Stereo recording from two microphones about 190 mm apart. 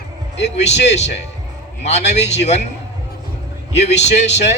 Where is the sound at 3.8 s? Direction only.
35° left (ahead or behind).